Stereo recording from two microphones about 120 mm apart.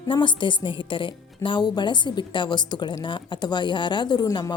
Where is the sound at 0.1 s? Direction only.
40° left (ahead or behind).